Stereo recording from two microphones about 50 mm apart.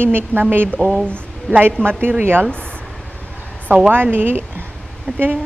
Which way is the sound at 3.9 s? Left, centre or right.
Right.